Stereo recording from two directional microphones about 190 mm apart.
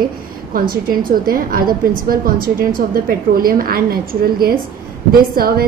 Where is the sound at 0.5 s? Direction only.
50° right (ahead or behind).